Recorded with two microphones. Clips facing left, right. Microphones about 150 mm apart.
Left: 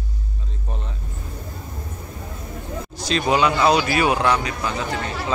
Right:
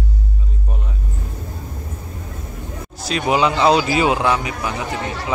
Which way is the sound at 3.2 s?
20° right (ahead or behind).